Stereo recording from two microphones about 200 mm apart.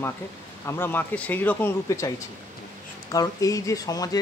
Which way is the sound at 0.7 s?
10° left (ahead or behind).